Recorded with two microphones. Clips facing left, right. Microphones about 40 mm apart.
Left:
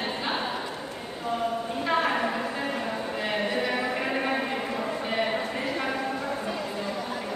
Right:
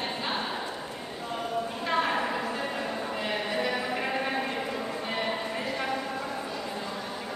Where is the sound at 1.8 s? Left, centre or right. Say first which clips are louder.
Left 3 dB; centre.